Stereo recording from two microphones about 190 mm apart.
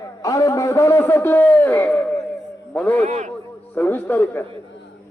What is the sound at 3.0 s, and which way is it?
Speech, 40° right (ahead or behind).